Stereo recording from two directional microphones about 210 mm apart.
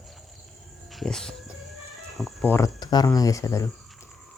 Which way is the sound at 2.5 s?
15° left (ahead or behind).